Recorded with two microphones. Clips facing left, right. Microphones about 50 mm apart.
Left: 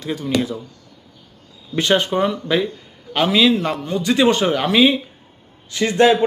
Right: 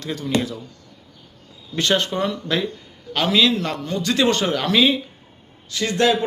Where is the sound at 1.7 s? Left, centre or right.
Centre.